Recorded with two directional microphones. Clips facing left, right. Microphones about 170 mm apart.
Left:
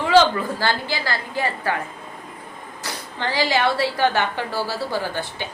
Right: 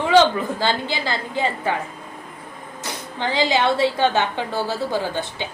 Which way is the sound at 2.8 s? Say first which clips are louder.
Right 1 dB; 20° right (ahead or behind).